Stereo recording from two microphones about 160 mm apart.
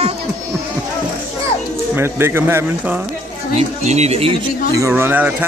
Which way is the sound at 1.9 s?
15° right (ahead or behind).